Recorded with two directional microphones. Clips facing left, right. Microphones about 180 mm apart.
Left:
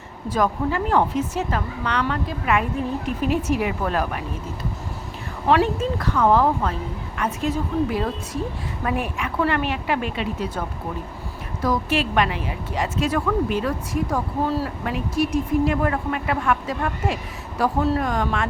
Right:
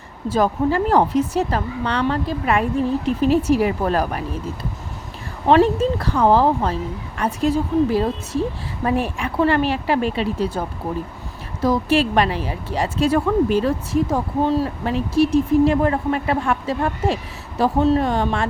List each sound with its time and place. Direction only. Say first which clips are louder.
0.3 s a woman's voice: right 4 dB; 30° right (ahead or behind)
5.5 s a woman's voice: right 5 dB; 30° right (ahead or behind)
11.6 s a woman's voice: right 5 dB; 30° right (ahead or behind)
14.8 s speech: right 6 dB; 30° right (ahead or behind)